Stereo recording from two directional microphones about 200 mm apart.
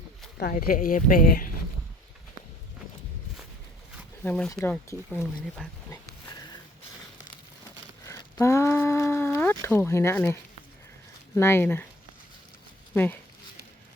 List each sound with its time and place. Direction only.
0.3 s speech: 50° left (ahead or behind)
4.2 s speech: 5° left (ahead or behind)
5.9 s a sound: 20° left (ahead or behind)
8.0 s a sound: 15° left (ahead or behind)
11.3 s speech: 10° left (ahead or behind)
12.9 s speech: 10° left (ahead or behind)